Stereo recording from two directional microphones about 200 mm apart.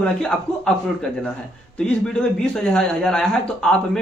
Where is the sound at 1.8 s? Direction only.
5° left (ahead or behind).